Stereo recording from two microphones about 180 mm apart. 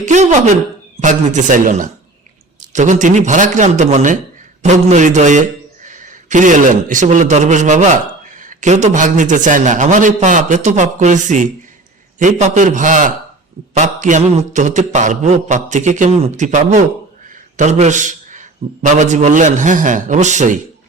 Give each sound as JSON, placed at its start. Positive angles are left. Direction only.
{"t": 0.0, "sound": "a sound", "side_deg": -40}
{"t": 0.9, "sound": "a man's voice", "side_deg": -40}
{"t": 13.7, "sound": "mantra", "side_deg": -40}
{"t": 17.2, "sound": "a man's voice", "side_deg": -40}